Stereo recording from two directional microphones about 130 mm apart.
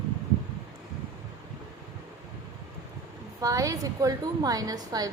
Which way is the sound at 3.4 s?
25° right (ahead or behind).